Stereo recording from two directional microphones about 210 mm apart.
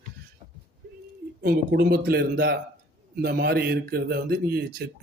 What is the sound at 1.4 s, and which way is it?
Speech, 45° right (ahead or behind).